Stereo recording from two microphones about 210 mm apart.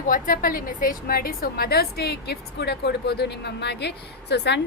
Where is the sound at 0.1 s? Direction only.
40° left (ahead or behind).